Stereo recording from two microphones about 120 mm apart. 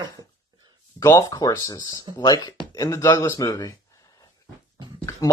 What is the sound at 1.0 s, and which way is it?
Speech, 30° left (ahead or behind).